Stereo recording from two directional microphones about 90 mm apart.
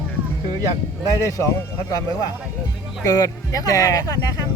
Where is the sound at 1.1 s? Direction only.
35° left (ahead or behind).